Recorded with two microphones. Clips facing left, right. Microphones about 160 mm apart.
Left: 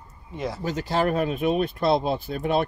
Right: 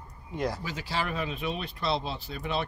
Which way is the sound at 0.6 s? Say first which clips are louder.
Left 9 dB; 45° left (ahead or behind).